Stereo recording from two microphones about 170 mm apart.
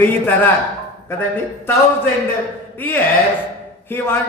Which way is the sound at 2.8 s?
10° left (ahead or behind).